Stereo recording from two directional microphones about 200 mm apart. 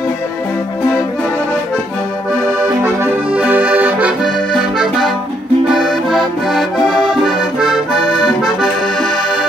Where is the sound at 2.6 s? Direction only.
10° right (ahead or behind).